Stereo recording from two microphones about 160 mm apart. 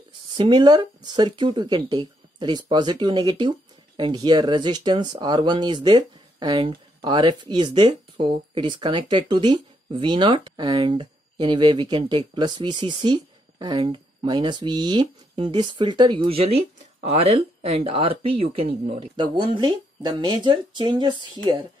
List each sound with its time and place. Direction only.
0.4 s speech: 30° right (ahead or behind)